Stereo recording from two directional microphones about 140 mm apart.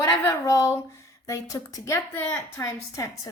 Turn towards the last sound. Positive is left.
turn(degrees=20)  # may be behind; listen again after turning